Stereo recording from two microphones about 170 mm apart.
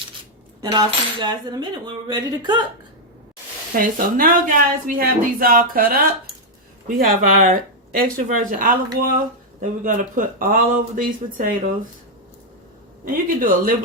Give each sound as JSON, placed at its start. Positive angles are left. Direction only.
{"t": 0.6, "sound": "cutlery", "side_deg": -25}
{"t": 3.8, "sound": "speech", "side_deg": -55}
{"t": 13.1, "sound": "speech", "side_deg": -55}